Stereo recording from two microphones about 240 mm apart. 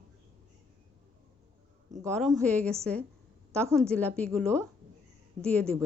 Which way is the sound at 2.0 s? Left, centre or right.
Centre.